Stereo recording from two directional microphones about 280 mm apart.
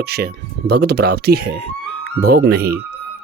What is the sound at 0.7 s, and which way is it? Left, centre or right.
Speech, right.